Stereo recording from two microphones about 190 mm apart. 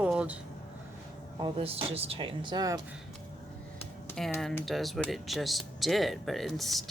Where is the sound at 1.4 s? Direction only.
30° right (ahead or behind).